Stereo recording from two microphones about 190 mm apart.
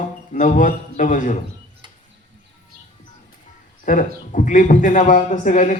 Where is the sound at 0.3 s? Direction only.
40° left (ahead or behind).